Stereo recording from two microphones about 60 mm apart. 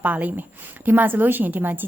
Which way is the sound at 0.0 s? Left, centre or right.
Right.